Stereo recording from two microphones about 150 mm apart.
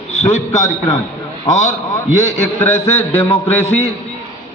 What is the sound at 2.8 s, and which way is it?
Speech, 15° left (ahead or behind).